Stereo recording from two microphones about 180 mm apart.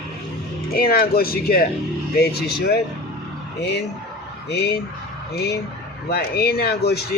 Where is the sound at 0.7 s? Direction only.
55° left (ahead or behind).